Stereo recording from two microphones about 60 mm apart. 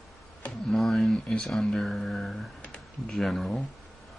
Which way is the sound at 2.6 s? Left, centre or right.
Centre.